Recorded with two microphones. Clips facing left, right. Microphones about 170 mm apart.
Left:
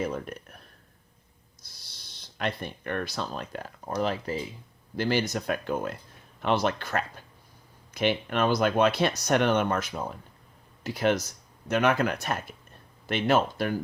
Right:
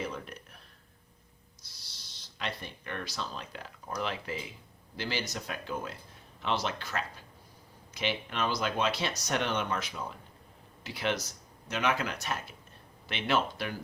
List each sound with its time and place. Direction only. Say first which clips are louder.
0.0 s speech: left 7 dB; 45° left (ahead or behind)
1.6 s speech: left 3 dB; 50° left (ahead or behind)
4.9 s speech: left 9 dB; 50° left (ahead or behind)